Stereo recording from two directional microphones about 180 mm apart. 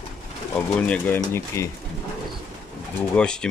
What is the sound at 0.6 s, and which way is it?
Speech, 5° left (ahead or behind).